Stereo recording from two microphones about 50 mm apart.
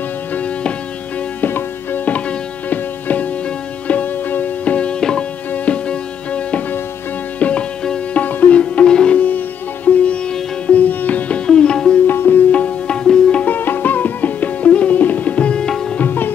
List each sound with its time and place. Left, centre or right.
0.3 s music: left
1.4 s music: left
2.1 s music: left
9.1 s sitar: left
10.7 s music: left
11.4 s sitar: centre
12.1 s music: left
12.4 s tabla: left
13.5 s music: left
16.0 s music: left